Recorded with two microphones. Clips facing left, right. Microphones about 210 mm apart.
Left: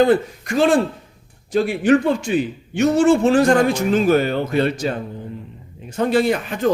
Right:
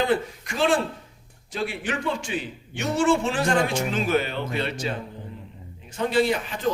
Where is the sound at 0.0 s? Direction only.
45° left (ahead or behind).